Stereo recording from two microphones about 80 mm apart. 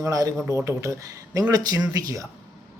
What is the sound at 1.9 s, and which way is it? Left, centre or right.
Speech, right.